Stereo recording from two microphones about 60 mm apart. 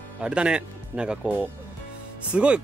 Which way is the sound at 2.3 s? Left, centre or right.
Centre.